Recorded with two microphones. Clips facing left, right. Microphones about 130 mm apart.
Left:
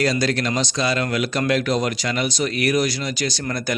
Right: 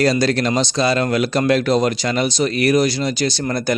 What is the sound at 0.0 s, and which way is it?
Speech, 35° right (ahead or behind).